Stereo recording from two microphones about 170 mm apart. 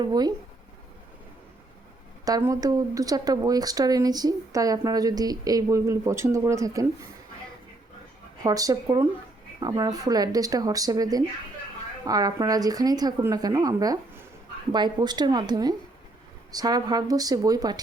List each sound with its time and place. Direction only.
0.0 s speech: 25° right (ahead or behind)
2.2 s speech: 20° right (ahead or behind)
8.4 s speech: 20° right (ahead or behind)